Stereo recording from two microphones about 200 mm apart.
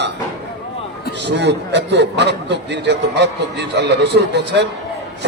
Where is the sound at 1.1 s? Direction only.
60° right (ahead or behind).